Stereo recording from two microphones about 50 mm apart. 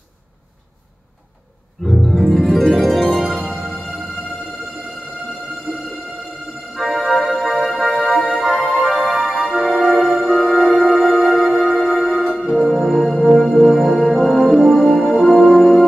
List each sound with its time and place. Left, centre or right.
1.9 s harp: centre
5.7 s music: centre
6.7 s organ: centre
7.4 s music: centre
8.4 s music: centre
8.7 s music: centre
12.3 s music: centre
12.5 s music: centre